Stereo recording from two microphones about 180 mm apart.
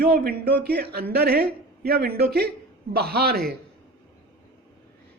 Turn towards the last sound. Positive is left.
turn(degrees=-60)  # may be behind; listen again after turning